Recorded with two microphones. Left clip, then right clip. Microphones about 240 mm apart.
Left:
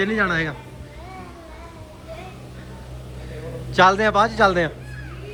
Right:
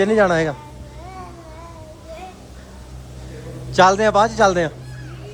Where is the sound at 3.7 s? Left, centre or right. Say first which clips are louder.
Right 2 dB; centre.